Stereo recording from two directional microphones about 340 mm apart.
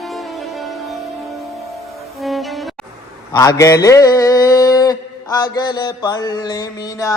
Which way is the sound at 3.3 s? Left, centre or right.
Centre.